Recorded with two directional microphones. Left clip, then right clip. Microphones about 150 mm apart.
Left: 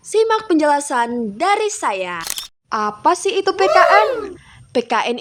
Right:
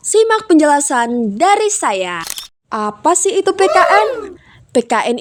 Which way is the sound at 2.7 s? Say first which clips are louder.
Right 2 dB; 35° right (ahead or behind).